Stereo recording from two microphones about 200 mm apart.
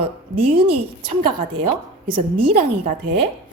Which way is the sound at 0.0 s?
25° right (ahead or behind).